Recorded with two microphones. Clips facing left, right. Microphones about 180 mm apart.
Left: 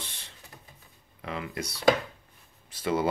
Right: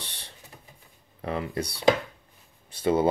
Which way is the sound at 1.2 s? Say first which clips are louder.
Right 5 dB; 35° right (ahead or behind).